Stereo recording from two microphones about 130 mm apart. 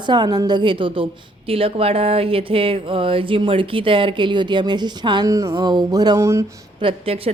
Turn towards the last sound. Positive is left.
turn(degrees=-45)  # may be behind; listen again after turning